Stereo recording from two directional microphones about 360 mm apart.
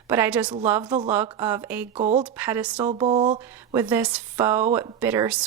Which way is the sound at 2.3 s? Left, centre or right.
Centre.